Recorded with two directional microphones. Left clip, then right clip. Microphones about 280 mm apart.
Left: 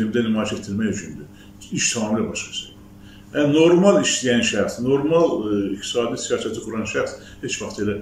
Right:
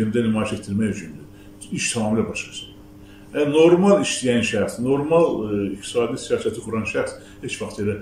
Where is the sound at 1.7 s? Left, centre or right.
Centre.